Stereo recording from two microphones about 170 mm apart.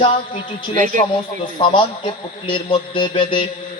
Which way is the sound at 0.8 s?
45° right (ahead or behind).